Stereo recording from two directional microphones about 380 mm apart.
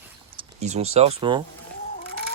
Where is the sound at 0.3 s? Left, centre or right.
Centre.